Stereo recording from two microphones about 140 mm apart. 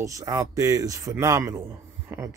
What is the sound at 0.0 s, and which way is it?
Speech, 25° right (ahead or behind).